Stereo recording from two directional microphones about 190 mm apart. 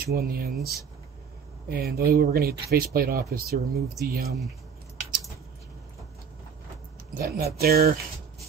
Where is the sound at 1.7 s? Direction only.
55° right (ahead or behind).